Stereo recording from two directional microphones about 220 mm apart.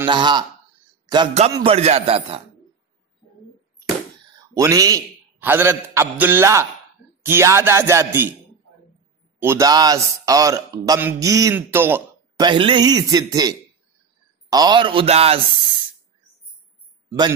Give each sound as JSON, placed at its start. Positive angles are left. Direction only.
{"t": 0.0, "sound": "a man's voice", "side_deg": -20}
{"t": 4.6, "sound": "a man's voice", "side_deg": -15}
{"t": 9.4, "sound": "a man's voice", "side_deg": -15}
{"t": 12.4, "sound": "a man's voice", "side_deg": -20}